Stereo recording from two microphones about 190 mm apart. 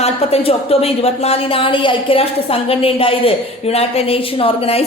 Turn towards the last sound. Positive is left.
turn(degrees=30)  # may be behind; listen again after turning